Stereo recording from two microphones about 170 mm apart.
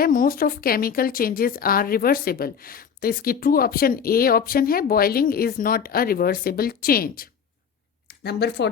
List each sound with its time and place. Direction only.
0.0 s speech: 55° left (ahead or behind)
8.0 s speech: 75° left (ahead or behind)